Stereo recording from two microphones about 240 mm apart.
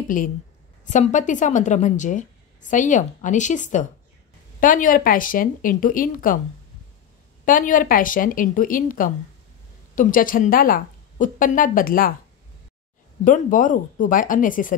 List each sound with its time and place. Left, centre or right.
0.1 s a woman's voice: left
7.4 s a woman's voice: left
13.2 s a woman's voice: left